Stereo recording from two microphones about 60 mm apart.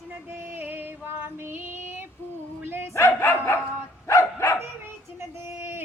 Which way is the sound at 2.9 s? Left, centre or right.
Left.